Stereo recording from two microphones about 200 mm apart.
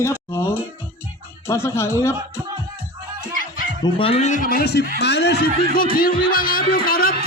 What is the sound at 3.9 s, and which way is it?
A man's voice, 30° left (ahead or behind).